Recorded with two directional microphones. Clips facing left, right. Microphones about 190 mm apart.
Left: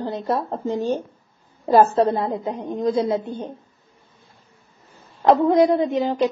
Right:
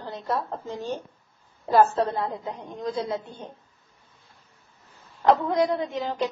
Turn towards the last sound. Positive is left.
turn(degrees=20)  # may be behind; listen again after turning